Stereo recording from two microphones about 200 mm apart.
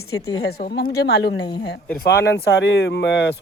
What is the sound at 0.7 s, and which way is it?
A woman's voice, 55° left (ahead or behind).